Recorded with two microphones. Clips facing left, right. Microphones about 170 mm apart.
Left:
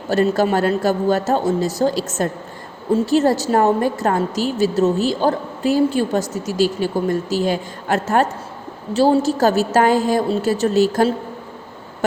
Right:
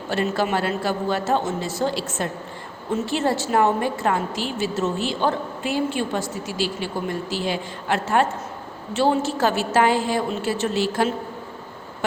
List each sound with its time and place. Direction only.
0.1 s a woman's voice: 40° left (ahead or behind)